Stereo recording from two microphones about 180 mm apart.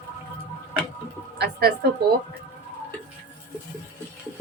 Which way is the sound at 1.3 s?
65° right (ahead or behind).